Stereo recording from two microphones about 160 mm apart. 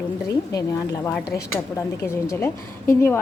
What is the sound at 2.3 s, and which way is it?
Speech, 15° left (ahead or behind).